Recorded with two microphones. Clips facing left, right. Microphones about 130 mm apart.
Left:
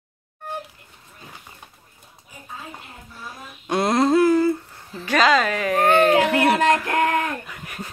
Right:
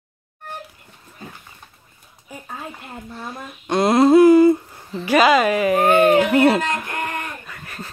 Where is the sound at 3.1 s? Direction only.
75° right (ahead or behind).